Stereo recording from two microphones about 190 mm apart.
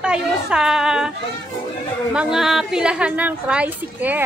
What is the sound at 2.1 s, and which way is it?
A woman's voice, centre (ahead or behind).